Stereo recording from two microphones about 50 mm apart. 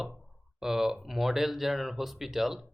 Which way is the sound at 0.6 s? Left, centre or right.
Centre.